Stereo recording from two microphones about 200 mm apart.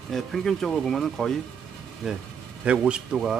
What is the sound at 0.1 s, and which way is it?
Speech, centre (ahead or behind).